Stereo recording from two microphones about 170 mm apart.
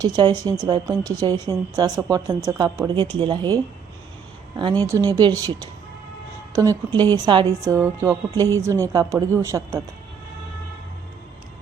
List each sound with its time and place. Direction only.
0.0 s speech: 25° right (ahead or behind)
6.5 s a woman's voice: 20° right (ahead or behind)